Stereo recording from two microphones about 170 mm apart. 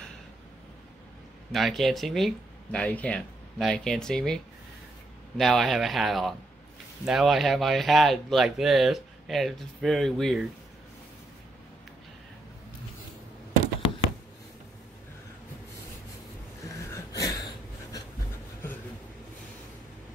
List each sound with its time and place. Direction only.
1.5 s speech: centre (ahead or behind)
5.4 s speech: centre (ahead or behind)
16.6 s a sound: 20° left (ahead or behind)